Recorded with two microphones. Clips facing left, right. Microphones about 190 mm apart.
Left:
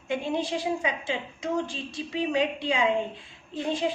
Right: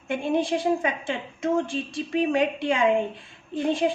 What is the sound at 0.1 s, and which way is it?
A woman's voice, 55° right (ahead or behind).